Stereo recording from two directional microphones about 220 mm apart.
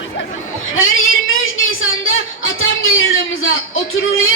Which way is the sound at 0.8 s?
65° left (ahead or behind).